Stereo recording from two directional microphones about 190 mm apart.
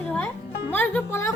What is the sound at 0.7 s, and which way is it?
Speech, 10° left (ahead or behind).